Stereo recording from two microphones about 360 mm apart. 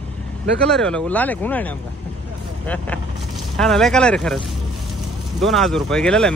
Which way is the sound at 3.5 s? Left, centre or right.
Centre.